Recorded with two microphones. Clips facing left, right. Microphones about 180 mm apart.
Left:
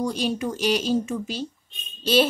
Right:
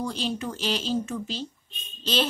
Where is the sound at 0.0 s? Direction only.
10° left (ahead or behind).